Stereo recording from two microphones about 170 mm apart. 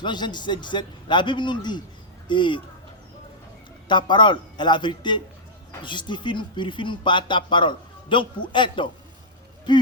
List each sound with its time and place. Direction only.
0.0 s speech: 25° left (ahead or behind)
3.8 s speech: 25° left (ahead or behind)